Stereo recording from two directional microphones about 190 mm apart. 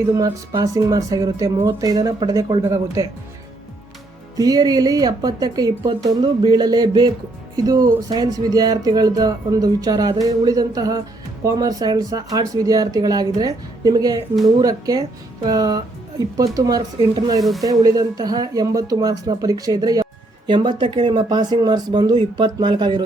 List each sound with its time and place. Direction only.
0.2 s speech: 20° right (ahead or behind)
4.4 s speech: 20° right (ahead or behind)